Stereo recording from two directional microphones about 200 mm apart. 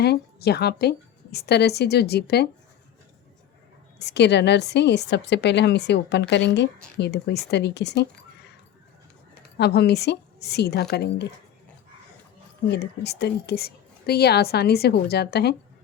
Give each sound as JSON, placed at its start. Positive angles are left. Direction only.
{"t": 0.0, "sound": "a woman's voice", "side_deg": 55}
{"t": 3.9, "sound": "a woman's voice", "side_deg": 60}
{"t": 9.6, "sound": "a woman's voice", "side_deg": 55}
{"t": 12.6, "sound": "a woman's voice", "side_deg": 55}